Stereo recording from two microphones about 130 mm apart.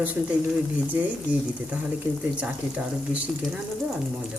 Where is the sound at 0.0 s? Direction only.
10° right (ahead or behind).